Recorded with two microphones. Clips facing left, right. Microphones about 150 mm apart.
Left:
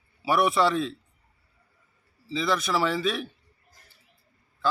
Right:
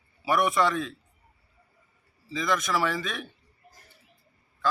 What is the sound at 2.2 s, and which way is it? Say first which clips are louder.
Speech: left 1 dB; 30° left (ahead or behind).